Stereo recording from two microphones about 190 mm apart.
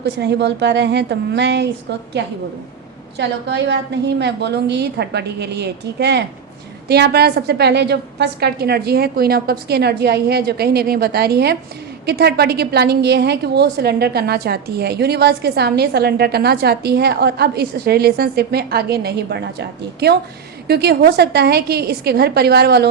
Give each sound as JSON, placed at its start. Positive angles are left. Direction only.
{"t": 0.0, "sound": "a woman's voice", "side_deg": -65}